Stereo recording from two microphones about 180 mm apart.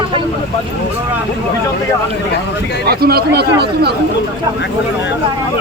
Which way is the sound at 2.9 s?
60° right (ahead or behind).